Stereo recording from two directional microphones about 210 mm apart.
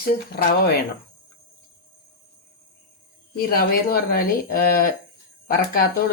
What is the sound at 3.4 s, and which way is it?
Speech, 45° left (ahead or behind).